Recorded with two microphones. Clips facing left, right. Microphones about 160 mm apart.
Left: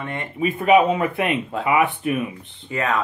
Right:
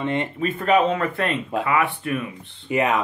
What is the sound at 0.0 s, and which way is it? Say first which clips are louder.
Speech: right 6 dB; 20° right (ahead or behind).